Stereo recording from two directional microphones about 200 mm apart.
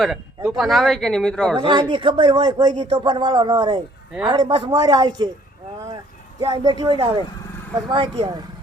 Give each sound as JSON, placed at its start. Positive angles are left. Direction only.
{"t": 0.0, "sound": "speech", "side_deg": 0}
{"t": 1.5, "sound": "speech", "side_deg": -25}
{"t": 6.4, "sound": "speech", "side_deg": -20}